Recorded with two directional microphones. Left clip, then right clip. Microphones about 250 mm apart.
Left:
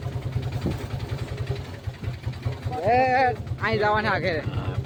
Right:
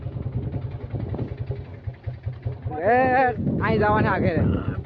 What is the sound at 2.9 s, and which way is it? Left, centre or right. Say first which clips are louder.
Speech: right 1 dB; centre.